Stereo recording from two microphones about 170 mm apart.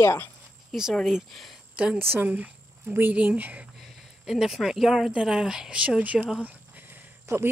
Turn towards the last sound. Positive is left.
turn(degrees=-10)  # may be behind; listen again after turning